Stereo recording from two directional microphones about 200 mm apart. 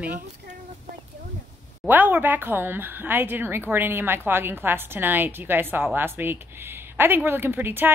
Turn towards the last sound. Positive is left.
turn(degrees=-10)  # may be behind; listen again after turning